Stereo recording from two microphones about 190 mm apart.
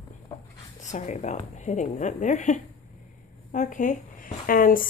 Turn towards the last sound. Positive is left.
turn(degrees=45)  # may be behind; listen again after turning